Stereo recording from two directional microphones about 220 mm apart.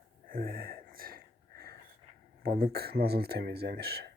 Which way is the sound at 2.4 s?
45° right (ahead or behind).